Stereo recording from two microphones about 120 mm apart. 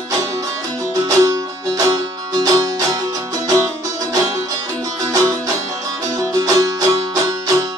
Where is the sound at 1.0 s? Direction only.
30° right (ahead or behind).